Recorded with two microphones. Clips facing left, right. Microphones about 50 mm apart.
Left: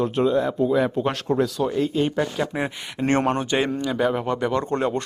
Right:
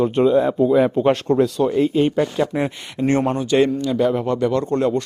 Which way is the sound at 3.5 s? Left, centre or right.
Centre.